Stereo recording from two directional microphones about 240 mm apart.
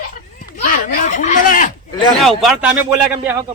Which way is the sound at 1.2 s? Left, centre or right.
Left.